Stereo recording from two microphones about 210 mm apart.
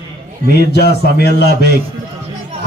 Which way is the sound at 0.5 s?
50° left (ahead or behind).